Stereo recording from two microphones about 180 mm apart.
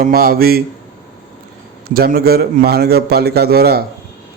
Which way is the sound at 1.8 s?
55° right (ahead or behind).